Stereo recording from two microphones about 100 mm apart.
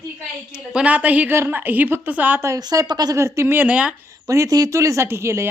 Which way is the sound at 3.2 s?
30° right (ahead or behind).